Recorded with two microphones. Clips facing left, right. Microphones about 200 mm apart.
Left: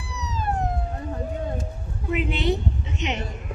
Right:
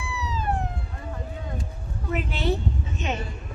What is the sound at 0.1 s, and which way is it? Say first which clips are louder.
Police car: left 1 dB; 40° left (ahead or behind).